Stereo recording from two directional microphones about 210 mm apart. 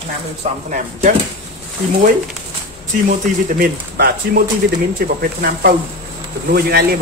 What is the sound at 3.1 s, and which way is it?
Speech, 45° right (ahead or behind).